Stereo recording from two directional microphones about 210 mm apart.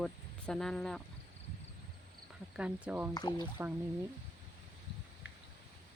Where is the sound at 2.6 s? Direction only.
5° right (ahead or behind).